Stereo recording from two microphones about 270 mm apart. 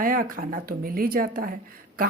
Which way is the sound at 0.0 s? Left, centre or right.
Right.